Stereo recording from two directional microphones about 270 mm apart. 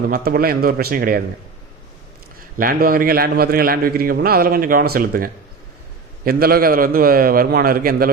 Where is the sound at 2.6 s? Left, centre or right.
Right.